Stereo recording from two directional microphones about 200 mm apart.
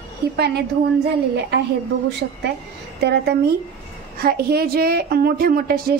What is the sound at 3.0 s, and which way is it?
A woman's voice, 55° right (ahead or behind).